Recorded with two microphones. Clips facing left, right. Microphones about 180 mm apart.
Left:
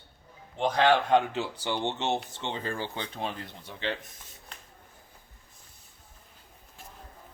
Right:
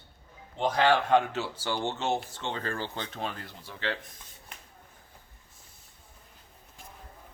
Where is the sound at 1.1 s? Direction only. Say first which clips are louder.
Even; 15° left (ahead or behind).